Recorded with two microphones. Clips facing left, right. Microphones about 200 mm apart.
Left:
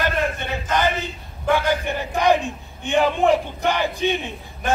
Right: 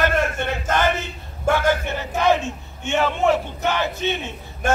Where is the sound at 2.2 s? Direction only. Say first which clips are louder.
Left 1 dB; 15° left (ahead or behind).